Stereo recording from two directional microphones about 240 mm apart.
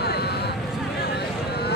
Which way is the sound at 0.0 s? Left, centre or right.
Left.